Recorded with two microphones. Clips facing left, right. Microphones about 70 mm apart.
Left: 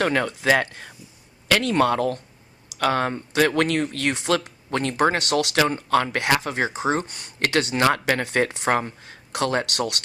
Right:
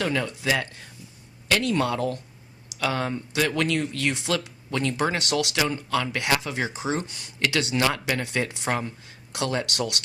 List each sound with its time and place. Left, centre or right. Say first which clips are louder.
0.0 s speech: left 4 dB; left